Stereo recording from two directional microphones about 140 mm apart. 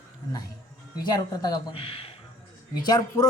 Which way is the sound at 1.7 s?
40° left (ahead or behind).